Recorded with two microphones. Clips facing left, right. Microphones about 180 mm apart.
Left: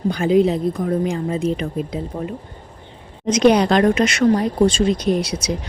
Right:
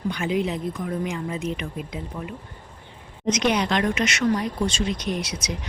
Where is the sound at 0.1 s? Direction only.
35° left (ahead or behind).